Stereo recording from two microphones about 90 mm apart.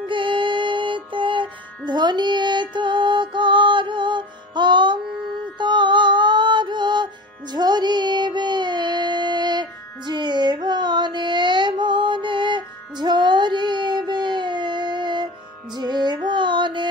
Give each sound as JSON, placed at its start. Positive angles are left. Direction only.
{"t": 0.0, "sound": "music", "side_deg": -65}